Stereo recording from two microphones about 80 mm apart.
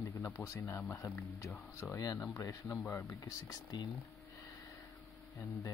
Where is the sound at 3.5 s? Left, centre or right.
Left.